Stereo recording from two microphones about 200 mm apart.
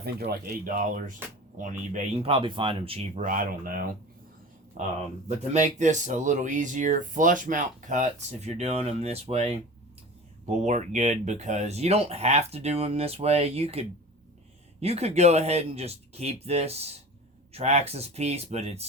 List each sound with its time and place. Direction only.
0.0 s speech: 50° right (ahead or behind); by 18.9 s 30° right (ahead or behind)